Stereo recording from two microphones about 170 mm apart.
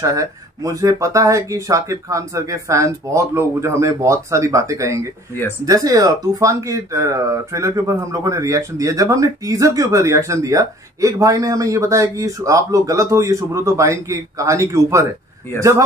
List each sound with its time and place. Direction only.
0.0 s speech: 20° right (ahead or behind)